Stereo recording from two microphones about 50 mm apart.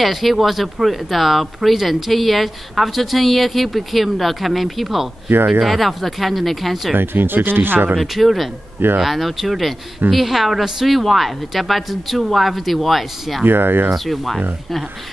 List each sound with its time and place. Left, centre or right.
0.0 s speech: centre
5.3 s speech: right
5.6 s speech: centre
7.0 s speech: right
8.0 s speech: centre
8.7 s speech: right
9.0 s speech: centre
13.5 s speech: right
13.9 s speech: centre